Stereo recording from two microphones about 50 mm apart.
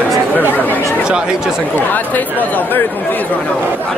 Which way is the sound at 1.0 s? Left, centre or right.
Centre.